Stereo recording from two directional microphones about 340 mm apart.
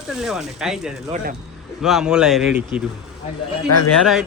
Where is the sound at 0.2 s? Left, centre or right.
Centre.